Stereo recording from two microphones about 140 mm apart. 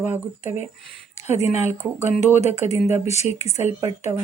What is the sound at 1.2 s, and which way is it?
A child's voice, 55° left (ahead or behind).